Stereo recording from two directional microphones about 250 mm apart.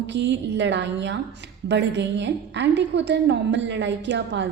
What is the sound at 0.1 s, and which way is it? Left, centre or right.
A woman's voice, right.